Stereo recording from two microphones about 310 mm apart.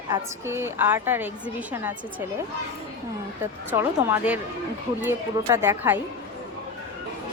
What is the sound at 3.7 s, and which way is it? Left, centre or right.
Speech, centre.